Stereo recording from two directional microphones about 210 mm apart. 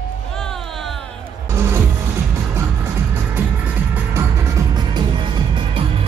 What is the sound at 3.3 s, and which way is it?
Music, 10° right (ahead or behind).